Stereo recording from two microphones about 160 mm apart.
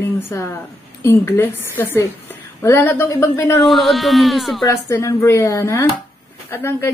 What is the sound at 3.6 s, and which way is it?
Speech, centre (ahead or behind).